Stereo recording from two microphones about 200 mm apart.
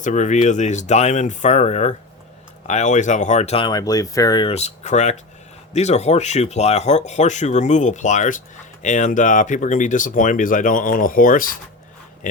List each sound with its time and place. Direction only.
0.0 s speech: 40° left (ahead or behind)